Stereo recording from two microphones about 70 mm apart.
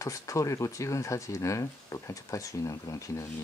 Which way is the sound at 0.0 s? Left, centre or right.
Left.